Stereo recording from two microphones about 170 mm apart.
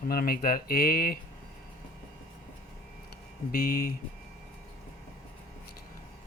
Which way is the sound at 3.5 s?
60° left (ahead or behind).